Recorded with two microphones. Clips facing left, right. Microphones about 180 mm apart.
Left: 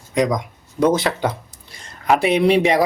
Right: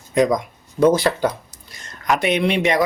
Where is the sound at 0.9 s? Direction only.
20° left (ahead or behind).